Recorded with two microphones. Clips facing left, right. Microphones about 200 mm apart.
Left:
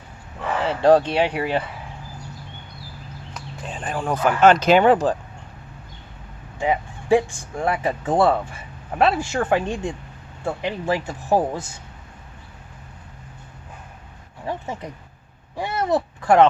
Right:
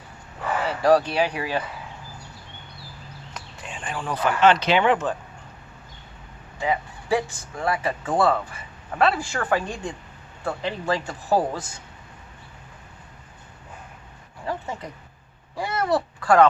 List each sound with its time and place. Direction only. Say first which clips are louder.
0.6 s speech: left 3 dB; 30° left (ahead or behind)
3.7 s speech: left 5 dB; 40° left (ahead or behind)
6.6 s speech: left 3 dB; 25° left (ahead or behind)
15.5 s speech: left 2 dB; 20° left (ahead or behind)